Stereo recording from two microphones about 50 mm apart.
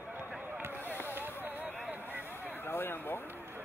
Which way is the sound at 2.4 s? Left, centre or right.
Left.